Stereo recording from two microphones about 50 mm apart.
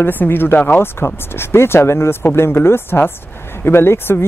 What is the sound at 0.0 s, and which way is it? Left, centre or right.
Speech, left.